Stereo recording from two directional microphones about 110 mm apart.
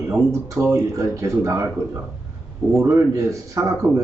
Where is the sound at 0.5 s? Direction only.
25° right (ahead or behind).